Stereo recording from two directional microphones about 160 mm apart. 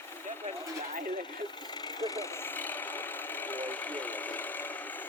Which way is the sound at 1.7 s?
25° left (ahead or behind).